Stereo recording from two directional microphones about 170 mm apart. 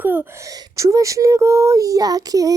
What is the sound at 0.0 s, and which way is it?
Speech, 10° right (ahead or behind).